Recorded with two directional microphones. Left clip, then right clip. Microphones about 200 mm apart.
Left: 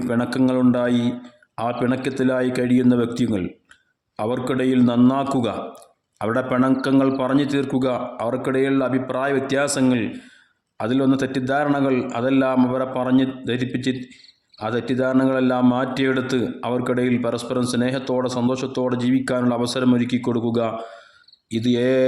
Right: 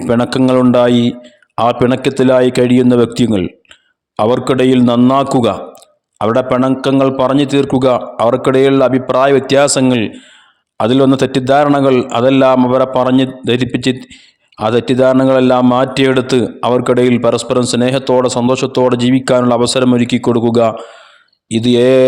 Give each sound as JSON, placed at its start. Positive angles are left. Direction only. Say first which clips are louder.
{"t": 0.0, "sound": "a man's voice", "louder": "right 9 dB", "side_deg": -40}